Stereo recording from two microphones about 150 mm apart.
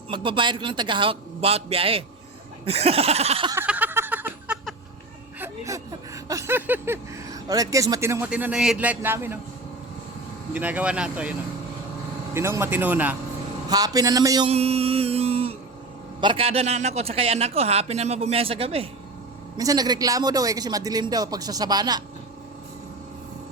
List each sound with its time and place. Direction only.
0.1 s a man's voice: 35° right (ahead or behind)
2.6 s a sound: 40° right (ahead or behind)
3.6 s a sound: 10° right (ahead or behind)
8.3 s a man's voice: 10° right (ahead or behind)
10.5 s a man's voice: 10° right (ahead or behind)
13.7 s a man's voice: 25° right (ahead or behind)
14.4 s mantra: 45° right (ahead or behind)
16.2 s a man's voice: 35° right (ahead or behind)
19.5 s a man's voice: 25° right (ahead or behind)